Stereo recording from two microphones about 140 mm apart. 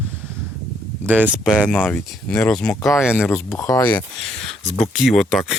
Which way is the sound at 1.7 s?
5° left (ahead or behind).